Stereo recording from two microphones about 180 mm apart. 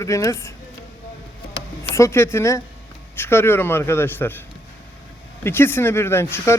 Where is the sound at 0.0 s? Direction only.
15° left (ahead or behind).